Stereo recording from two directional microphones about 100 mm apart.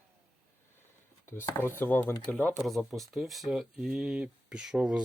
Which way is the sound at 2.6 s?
Centre (ahead or behind).